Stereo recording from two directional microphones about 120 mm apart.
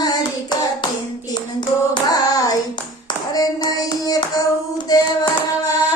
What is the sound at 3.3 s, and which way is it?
Clapping, 30° left (ahead or behind).